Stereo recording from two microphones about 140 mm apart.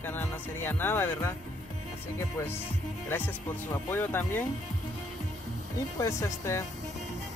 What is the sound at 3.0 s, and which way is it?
Speech, 15° left (ahead or behind).